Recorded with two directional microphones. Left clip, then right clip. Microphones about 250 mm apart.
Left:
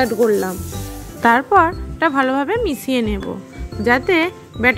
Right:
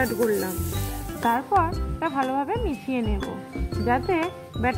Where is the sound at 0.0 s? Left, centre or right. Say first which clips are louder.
Left 8 dB; centre.